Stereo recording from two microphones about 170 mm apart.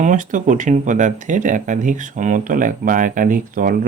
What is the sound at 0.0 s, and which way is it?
Speech, 50° right (ahead or behind).